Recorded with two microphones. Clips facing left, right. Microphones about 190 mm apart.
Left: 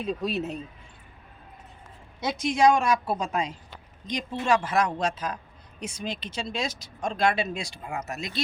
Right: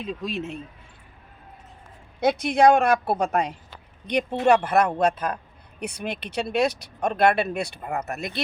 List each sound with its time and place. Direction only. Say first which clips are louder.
0.0 s speech: left 2 dB; 40° left (ahead or behind)
2.2 s speech: right 4 dB; 55° right (ahead or behind)